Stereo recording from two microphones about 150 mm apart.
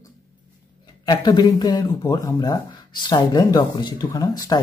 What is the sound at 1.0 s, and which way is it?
Speech, 30° left (ahead or behind).